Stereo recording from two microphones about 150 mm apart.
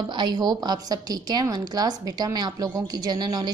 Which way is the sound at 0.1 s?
30° right (ahead or behind).